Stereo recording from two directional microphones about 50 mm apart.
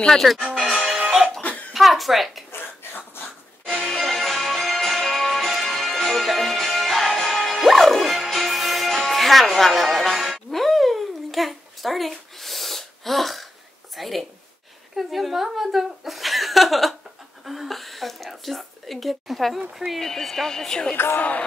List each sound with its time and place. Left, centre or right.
0.0 s speech: centre
1.7 s a woman's voice: centre
2.5 s a sound: left
3.6 s music: centre
13.9 s a sound: centre
15.0 s chuckle: centre
17.5 s throat clearing: centre
20.0 s a woman's voice: centre
20.9 s speech: left
21.2 s music: left